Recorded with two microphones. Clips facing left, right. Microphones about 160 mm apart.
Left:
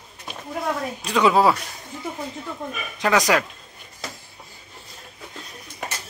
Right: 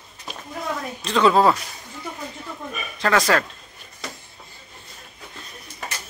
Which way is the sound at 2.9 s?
15° left (ahead or behind).